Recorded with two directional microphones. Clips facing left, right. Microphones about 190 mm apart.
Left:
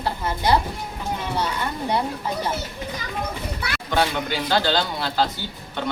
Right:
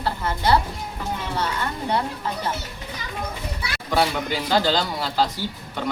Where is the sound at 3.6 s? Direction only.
60° left (ahead or behind).